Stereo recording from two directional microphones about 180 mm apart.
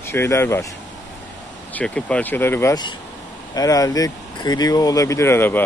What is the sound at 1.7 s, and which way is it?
Speech, 5° left (ahead or behind).